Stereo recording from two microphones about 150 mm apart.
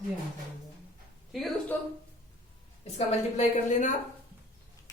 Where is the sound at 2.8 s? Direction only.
45° left (ahead or behind).